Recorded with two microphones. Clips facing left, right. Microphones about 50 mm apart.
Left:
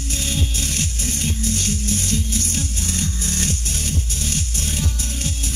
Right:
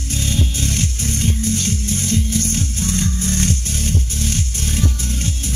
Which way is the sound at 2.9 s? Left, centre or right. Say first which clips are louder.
Right 6 dB; right.